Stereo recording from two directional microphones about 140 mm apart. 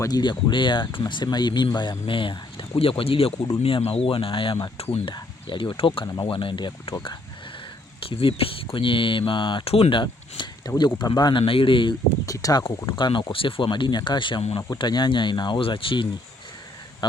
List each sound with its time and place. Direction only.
0.0 s speech: 30° left (ahead or behind)